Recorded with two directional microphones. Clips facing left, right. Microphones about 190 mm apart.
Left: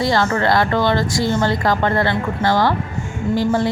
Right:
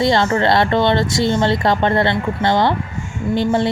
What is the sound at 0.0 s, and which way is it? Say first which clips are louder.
A woman's voice: right 2 dB; 20° right (ahead or behind).